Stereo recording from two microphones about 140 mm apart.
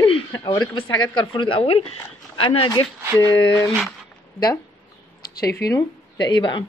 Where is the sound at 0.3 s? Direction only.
30° left (ahead or behind).